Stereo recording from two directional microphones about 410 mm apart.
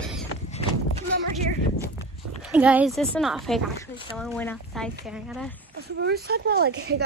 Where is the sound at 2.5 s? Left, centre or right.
Centre.